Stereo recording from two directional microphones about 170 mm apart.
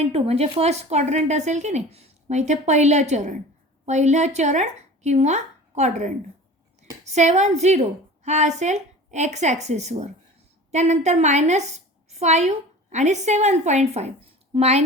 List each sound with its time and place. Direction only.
0.0 s a woman's voice: 35° right (ahead or behind)